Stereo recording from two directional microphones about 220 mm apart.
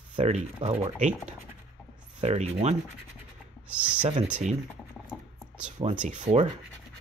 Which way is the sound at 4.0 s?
25° right (ahead or behind).